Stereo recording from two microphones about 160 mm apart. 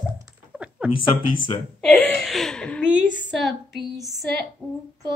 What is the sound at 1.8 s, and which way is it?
Laughter, 5° left (ahead or behind).